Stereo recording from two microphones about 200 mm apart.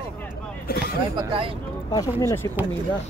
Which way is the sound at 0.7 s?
50° left (ahead or behind).